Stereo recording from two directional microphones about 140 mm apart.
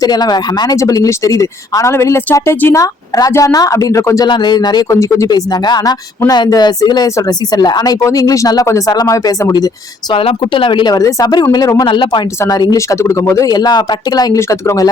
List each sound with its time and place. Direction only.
0.0 s speech: 30° left (ahead or behind)
4.3 s speech: 30° left (ahead or behind)
10.1 s speech: 40° left (ahead or behind); by 14.8 s 20° left (ahead or behind)